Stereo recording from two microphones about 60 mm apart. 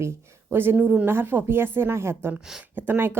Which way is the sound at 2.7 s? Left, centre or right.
Right.